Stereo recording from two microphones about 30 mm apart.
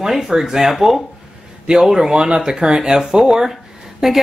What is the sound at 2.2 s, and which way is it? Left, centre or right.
Speech, right.